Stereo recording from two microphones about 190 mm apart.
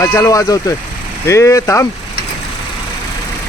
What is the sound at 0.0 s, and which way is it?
Speech, 15° left (ahead or behind).